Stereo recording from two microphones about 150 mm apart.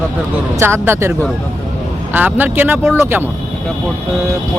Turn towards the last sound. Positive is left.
turn(degrees=-15)  # may be behind; listen again after turning